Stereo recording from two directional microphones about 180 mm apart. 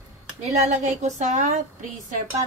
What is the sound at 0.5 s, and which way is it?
A woman's voice, 40° right (ahead or behind).